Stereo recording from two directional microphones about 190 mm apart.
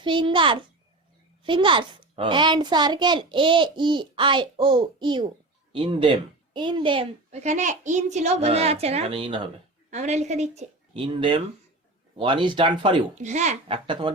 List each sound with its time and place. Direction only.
0.0 s a child's voice: 25° right (ahead or behind)
9.9 s a woman's voice: 35° right (ahead or behind)
13.1 s a woman's voice: 40° right (ahead or behind)